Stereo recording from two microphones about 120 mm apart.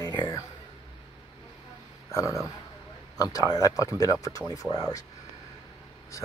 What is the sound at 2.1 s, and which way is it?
Speech, 25° left (ahead or behind).